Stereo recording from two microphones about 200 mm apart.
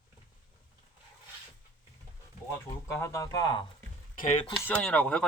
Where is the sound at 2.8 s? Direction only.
15° left (ahead or behind).